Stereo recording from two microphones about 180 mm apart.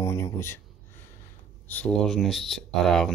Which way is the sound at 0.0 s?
15° left (ahead or behind).